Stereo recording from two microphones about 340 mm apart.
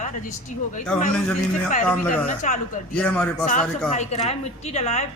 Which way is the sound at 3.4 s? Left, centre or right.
Left.